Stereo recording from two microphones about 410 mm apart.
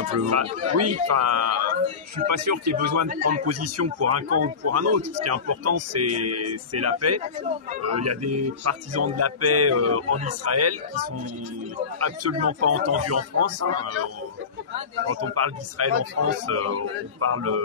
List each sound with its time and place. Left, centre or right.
0.3 s speech: right
3.1 s a man's voice: centre
3.4 s speech: right
12.0 s speech: right
15.0 s speech: right